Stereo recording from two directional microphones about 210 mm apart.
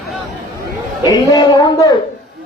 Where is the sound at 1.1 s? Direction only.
20° left (ahead or behind).